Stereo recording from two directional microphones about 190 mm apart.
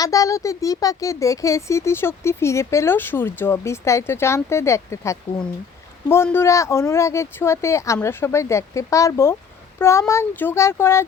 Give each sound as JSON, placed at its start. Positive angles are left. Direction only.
{"t": 0.0, "sound": "speech", "side_deg": 15}